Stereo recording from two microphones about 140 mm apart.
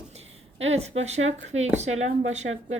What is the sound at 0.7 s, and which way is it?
Speech, 50° right (ahead or behind).